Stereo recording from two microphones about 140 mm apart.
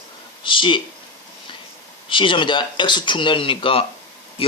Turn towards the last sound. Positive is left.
turn(degrees=40)  # may be behind; listen again after turning